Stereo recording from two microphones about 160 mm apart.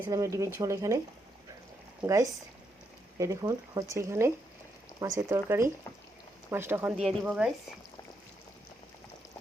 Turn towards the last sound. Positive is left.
turn(degrees=-5)  # may be behind; listen again after turning